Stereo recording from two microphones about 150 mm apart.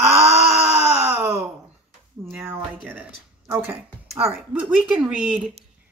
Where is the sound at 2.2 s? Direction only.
15° right (ahead or behind).